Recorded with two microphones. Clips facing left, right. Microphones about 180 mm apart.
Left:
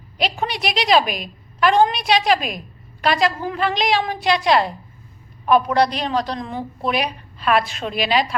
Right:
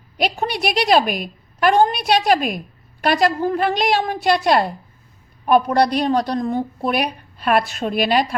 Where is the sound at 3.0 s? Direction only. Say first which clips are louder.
Right 2 dB; 55° right (ahead or behind).